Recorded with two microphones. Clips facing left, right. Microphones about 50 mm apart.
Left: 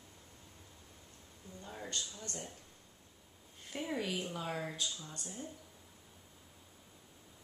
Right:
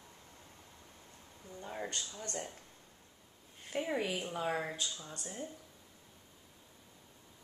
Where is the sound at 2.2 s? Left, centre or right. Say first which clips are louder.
Right 4 dB; right.